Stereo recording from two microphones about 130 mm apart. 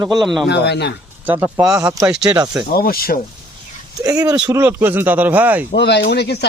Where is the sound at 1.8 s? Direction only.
10° right (ahead or behind).